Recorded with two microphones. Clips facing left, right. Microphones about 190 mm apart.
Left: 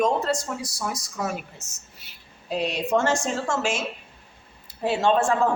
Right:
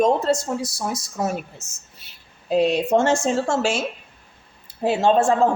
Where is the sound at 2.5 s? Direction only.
30° right (ahead or behind).